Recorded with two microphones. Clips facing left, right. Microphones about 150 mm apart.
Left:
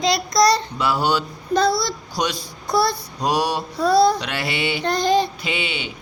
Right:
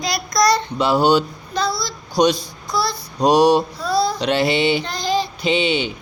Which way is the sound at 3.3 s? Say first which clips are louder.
Right 9 dB; 5° left (ahead or behind).